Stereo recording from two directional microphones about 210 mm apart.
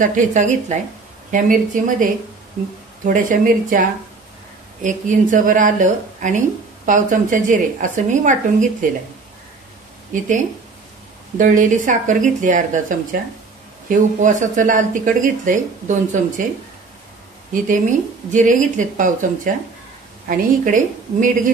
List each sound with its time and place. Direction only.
0.0 s speech: 40° right (ahead or behind)
3.1 s speech: 40° right (ahead or behind)
4.8 s speech: 35° right (ahead or behind)
10.1 s speech: 35° right (ahead or behind)
17.5 s speech: 40° right (ahead or behind)